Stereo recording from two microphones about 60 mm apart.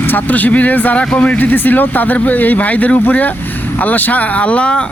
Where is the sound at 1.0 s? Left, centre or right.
Centre.